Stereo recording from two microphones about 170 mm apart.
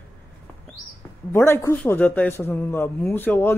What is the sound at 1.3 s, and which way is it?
Speech, 15° left (ahead or behind).